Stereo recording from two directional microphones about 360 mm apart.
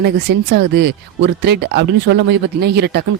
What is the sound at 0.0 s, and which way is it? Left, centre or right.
Speech, right.